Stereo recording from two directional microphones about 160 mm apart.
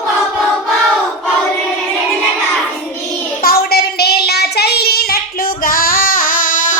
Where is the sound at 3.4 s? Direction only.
70° left (ahead or behind).